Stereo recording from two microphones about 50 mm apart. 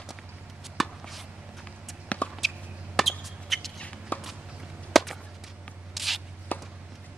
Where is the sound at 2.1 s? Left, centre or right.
Left.